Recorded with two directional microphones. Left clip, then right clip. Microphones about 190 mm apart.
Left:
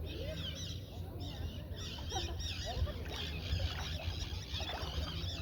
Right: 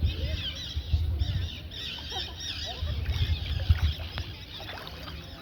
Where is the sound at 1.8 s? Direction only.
30° right (ahead or behind).